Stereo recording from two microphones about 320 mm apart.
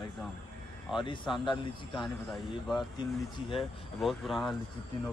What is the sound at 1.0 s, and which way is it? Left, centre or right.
Speech, centre.